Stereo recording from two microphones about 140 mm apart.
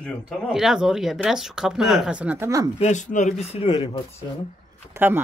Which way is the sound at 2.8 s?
60° left (ahead or behind).